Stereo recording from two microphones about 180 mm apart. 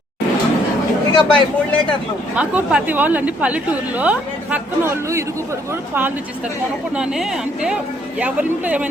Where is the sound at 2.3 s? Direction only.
5° right (ahead or behind).